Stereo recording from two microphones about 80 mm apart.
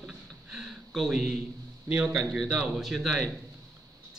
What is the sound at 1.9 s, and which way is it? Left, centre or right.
Speech, centre.